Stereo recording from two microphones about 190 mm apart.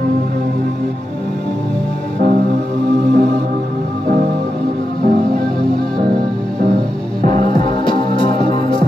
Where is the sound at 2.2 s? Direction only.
45° right (ahead or behind).